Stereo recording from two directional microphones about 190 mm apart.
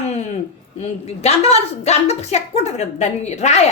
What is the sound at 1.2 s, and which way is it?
A woman's voice, 35° left (ahead or behind).